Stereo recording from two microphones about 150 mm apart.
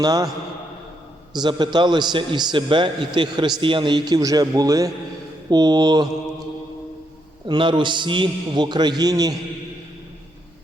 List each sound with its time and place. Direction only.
0.0 s a man's voice: 25° right (ahead or behind)
1.3 s a man's voice: 30° right (ahead or behind)
7.4 s a man's voice: 30° right (ahead or behind)